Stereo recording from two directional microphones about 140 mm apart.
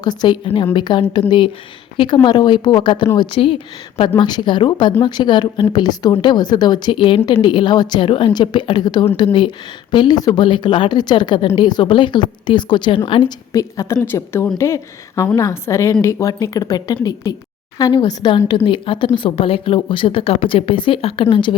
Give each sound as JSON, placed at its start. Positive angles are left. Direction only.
{"t": 0.0, "sound": "a woman's voice", "side_deg": 30}
{"t": 2.2, "sound": "speech", "side_deg": 30}
{"t": 13.5, "sound": "a woman's voice", "side_deg": 25}